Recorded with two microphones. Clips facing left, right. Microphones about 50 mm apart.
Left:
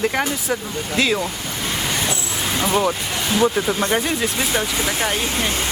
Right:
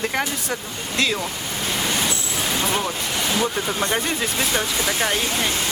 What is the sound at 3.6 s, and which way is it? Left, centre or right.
Speech, centre.